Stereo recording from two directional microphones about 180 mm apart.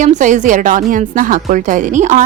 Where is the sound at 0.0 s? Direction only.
45° right (ahead or behind).